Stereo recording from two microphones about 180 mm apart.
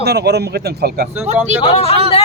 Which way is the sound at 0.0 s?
65° right (ahead or behind).